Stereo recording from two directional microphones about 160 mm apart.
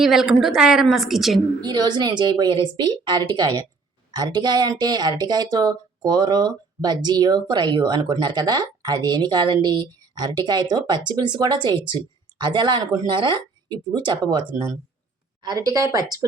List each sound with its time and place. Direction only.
0.0 s a woman's voice: centre (ahead or behind)
1.6 s speech: 25° right (ahead or behind)